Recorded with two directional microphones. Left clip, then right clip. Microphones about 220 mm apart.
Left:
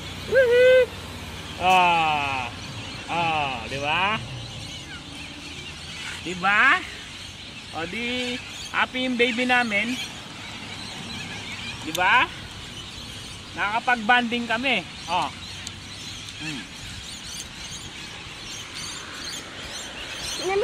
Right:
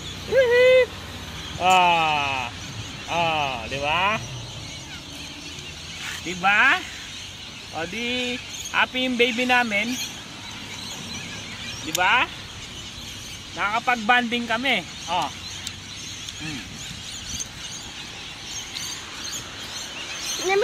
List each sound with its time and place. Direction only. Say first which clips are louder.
0.6 s owl: even; 15° right (ahead or behind)
1.6 s a sound: right 1 dB; 15° right (ahead or behind)
6.4 s speech: even; 5° right (ahead or behind)
11.9 s speech: even; 10° right (ahead or behind)
13.6 s speech: even; 15° right (ahead or behind)